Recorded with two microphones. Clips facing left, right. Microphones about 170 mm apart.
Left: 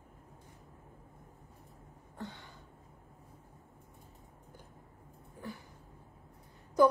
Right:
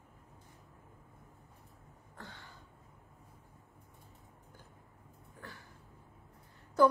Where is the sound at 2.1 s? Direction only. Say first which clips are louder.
Left 7 dB; 20° left (ahead or behind).